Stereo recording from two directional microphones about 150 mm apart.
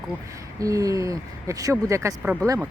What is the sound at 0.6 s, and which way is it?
Speech, 20° right (ahead or behind).